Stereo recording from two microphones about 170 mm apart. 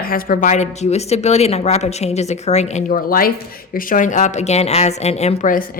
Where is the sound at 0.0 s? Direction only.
55° left (ahead or behind); by 3.0 s 40° left (ahead or behind).